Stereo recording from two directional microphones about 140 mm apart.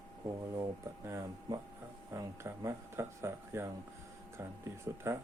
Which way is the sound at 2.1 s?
20° right (ahead or behind).